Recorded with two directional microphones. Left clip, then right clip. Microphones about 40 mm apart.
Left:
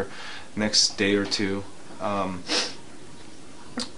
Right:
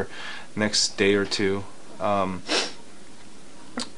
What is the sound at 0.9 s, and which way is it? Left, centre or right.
Speech, centre.